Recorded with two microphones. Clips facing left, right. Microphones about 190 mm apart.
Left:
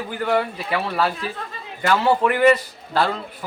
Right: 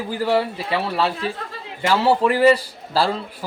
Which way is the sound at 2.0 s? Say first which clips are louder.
Right 2 dB; 30° right (ahead or behind).